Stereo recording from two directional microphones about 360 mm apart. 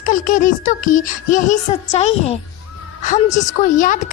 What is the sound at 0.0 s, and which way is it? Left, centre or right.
A woman's voice, left.